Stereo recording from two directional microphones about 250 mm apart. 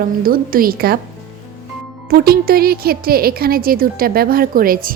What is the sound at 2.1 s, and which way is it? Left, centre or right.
A woman's voice, right.